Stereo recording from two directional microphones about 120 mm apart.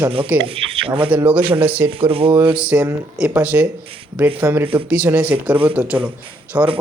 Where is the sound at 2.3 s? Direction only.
10° right (ahead or behind).